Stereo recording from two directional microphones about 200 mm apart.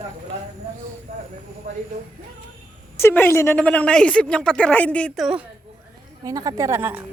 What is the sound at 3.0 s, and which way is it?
Speech, 10° left (ahead or behind).